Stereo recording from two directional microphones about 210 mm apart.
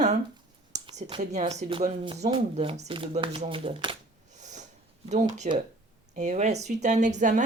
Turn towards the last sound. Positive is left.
turn(degrees=-35)  # may be behind; listen again after turning